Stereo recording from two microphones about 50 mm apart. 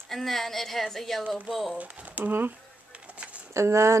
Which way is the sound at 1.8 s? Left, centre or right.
Right.